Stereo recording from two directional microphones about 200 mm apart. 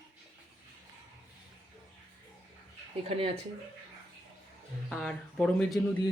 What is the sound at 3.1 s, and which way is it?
Speech, 30° right (ahead or behind).